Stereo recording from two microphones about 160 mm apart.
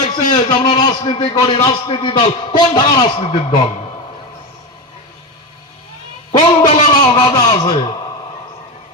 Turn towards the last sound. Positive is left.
turn(degrees=30)  # may be behind; listen again after turning